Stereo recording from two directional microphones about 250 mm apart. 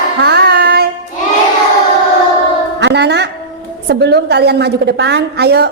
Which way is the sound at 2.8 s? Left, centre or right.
Right.